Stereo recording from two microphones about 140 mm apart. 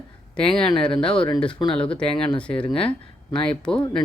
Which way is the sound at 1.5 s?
35° left (ahead or behind).